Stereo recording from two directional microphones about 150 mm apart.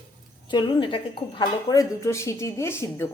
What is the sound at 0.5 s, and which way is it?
A woman's voice, 30° left (ahead or behind).